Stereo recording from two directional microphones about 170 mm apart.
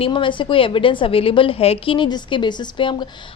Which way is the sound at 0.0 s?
30° left (ahead or behind).